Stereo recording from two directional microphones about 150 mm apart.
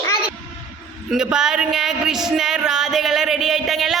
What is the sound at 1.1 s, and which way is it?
Music, 5° right (ahead or behind).